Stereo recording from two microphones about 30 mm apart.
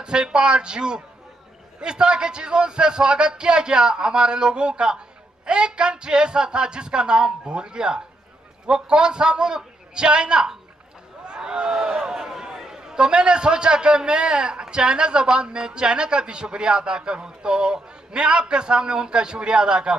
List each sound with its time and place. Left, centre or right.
0.0 s a man's voice: right
11.2 s a sound: right
12.0 s a man's voice: centre